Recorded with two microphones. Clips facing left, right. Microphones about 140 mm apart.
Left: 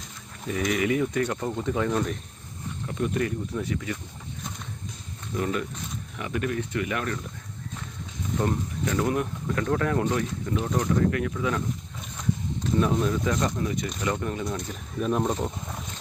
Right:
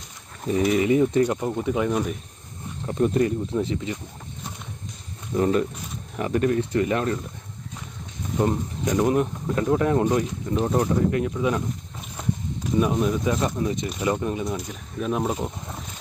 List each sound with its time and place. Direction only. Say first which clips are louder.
0.4 s speech: right 5 dB; 30° right (ahead or behind)
1.2 s speech: right 5 dB; 15° right (ahead or behind)
2.8 s speech: right 6 dB; 35° right (ahead or behind)
5.4 s speech: right 7 dB; 35° right (ahead or behind)
8.4 s speech: right 4 dB; 15° right (ahead or behind)
10.5 s speech: right 4 dB; 30° right (ahead or behind)
12.7 s speech: right 2 dB; 15° right (ahead or behind)
14.4 s speech: right 2 dB; 5° right (ahead or behind)